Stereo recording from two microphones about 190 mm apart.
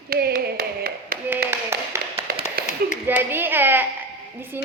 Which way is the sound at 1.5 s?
15° right (ahead or behind).